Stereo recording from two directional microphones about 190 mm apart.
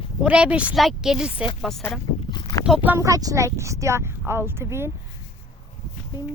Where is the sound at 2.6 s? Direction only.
5° right (ahead or behind).